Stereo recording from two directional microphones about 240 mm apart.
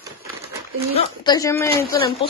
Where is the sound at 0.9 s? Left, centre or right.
Centre.